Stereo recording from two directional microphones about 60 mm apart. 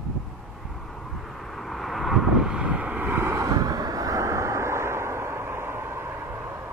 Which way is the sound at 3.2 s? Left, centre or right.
Right.